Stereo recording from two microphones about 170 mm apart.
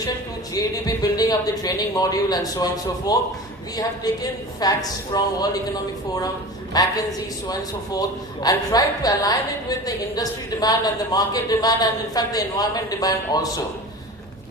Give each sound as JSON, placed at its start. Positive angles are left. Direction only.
{"t": 0.6, "sound": "a woman's voice", "side_deg": 20}